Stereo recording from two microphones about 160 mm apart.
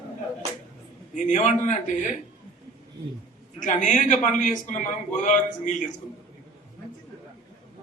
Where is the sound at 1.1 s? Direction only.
50° left (ahead or behind).